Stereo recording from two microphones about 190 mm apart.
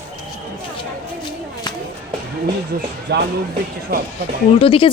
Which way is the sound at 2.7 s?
50° right (ahead or behind).